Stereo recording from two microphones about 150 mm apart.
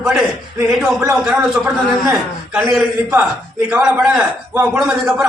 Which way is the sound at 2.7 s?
Centre (ahead or behind).